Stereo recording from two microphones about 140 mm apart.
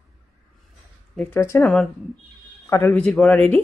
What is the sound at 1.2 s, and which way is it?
A woman's voice, 15° left (ahead or behind).